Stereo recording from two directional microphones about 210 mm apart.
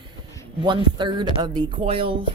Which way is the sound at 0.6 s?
20° right (ahead or behind).